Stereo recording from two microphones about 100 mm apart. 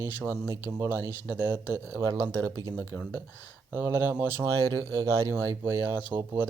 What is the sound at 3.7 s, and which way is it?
Speech, 25° right (ahead or behind).